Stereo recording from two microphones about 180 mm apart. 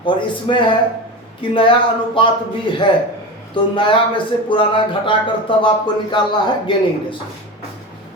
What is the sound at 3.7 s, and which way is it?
Speech, 25° left (ahead or behind).